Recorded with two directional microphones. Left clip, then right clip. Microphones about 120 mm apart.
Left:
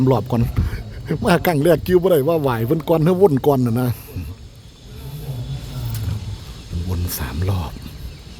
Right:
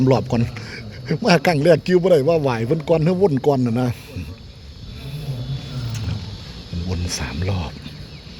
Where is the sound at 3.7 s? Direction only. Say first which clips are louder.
Even; 45° left (ahead or behind).